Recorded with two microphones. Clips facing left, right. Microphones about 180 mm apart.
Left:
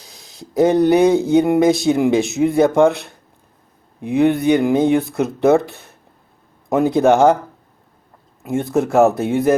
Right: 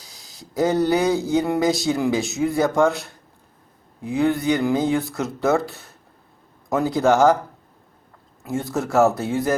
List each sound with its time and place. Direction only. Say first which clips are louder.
0.3 s speech: left 6 dB; 20° left (ahead or behind)
8.7 s speech: left 4 dB; 20° left (ahead or behind)